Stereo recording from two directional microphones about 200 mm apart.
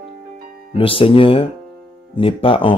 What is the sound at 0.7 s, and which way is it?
Speech, 25° left (ahead or behind).